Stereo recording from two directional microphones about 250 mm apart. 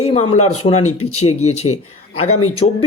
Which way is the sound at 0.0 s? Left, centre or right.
Left.